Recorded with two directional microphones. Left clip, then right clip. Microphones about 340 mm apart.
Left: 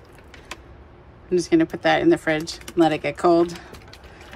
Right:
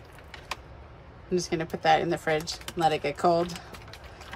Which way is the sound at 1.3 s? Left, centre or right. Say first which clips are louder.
Left 10 dB; centre.